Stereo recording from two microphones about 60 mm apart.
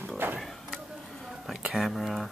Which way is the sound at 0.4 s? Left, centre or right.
Centre.